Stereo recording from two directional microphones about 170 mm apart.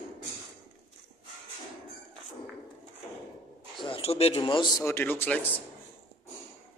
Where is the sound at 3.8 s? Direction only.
35° left (ahead or behind); by 5.4 s 10° left (ahead or behind).